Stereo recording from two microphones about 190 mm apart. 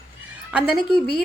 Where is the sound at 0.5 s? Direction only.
5° right (ahead or behind).